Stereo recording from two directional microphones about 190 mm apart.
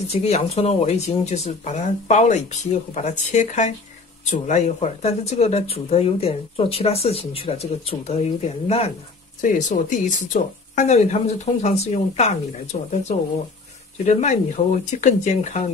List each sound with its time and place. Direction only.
0.1 s speech: 35° left (ahead or behind)
9.4 s speech: 40° left (ahead or behind)
14.0 s speech: 40° left (ahead or behind)